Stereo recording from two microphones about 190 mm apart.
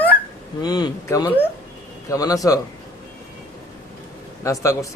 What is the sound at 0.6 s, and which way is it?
Speech, 20° left (ahead or behind).